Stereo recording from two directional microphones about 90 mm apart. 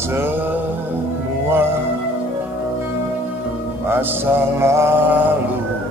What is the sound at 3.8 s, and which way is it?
Mantra, 25° right (ahead or behind).